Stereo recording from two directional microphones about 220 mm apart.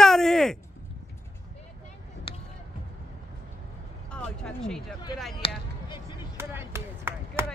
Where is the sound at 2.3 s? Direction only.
25° left (ahead or behind).